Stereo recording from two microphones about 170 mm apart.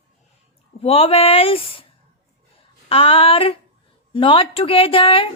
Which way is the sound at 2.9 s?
30° left (ahead or behind).